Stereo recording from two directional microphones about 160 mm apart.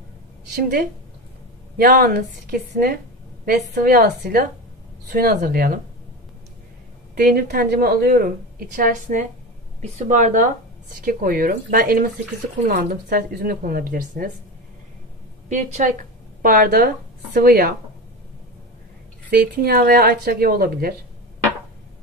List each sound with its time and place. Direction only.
1.8 s a woman's voice: 65° right (ahead or behind)
7.2 s a woman's voice: 70° right (ahead or behind)
15.4 s a woman's voice: 50° right (ahead or behind)
16.4 s a woman's voice: 60° right (ahead or behind)
19.3 s a woman's voice: 75° right (ahead or behind)